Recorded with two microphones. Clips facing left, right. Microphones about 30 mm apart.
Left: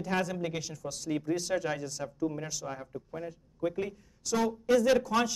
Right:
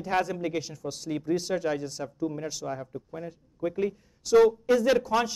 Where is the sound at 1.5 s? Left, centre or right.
Centre.